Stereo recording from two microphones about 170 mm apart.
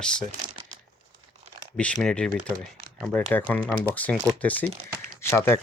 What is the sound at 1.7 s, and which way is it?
Speech, 5° left (ahead or behind).